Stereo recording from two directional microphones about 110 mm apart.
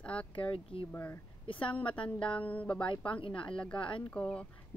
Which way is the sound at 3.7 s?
50° left (ahead or behind).